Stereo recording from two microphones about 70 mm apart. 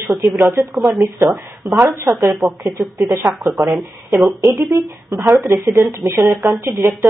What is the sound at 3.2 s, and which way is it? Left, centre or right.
Speech, right.